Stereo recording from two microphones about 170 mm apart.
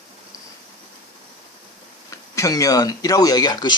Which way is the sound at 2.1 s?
20° left (ahead or behind).